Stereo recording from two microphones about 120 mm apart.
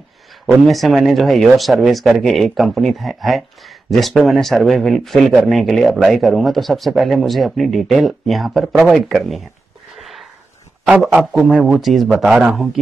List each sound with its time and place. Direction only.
0.5 s speech: centre (ahead or behind)
9.9 s a sound: centre (ahead or behind)
10.9 s speech: 5° right (ahead or behind)